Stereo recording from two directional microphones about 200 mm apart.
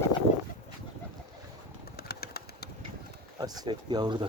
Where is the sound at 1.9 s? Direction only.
50° left (ahead or behind).